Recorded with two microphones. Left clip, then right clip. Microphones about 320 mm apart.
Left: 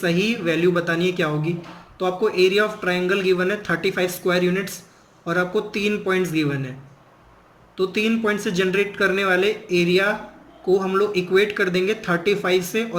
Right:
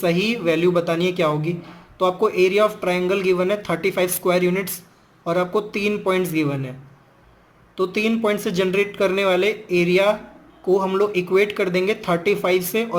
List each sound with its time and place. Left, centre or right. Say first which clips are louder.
0.0 s speech: right 2 dB; centre
7.8 s speech: right 1 dB; centre